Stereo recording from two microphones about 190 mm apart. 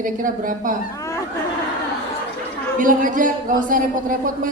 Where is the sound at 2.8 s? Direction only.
45° right (ahead or behind).